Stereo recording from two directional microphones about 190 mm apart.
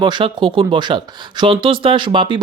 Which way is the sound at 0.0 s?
25° right (ahead or behind).